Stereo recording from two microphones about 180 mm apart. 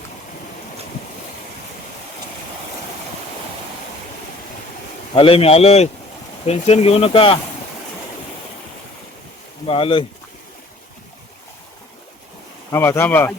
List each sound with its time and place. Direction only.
5.1 s speech: 30° left (ahead or behind)
9.6 s speech: 30° left (ahead or behind)
12.7 s speech: 15° left (ahead or behind)